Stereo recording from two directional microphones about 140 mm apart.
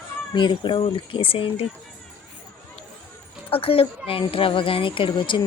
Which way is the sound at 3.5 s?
40° left (ahead or behind).